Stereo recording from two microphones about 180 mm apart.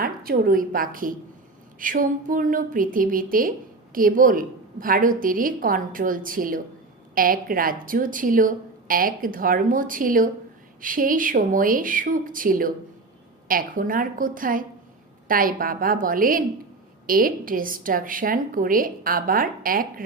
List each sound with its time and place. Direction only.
0.0 s a woman's voice: 55° right (ahead or behind)